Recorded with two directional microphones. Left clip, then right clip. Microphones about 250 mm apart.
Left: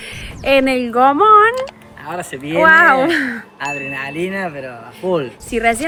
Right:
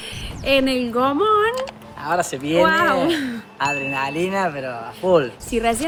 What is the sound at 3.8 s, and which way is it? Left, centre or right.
Speech, centre.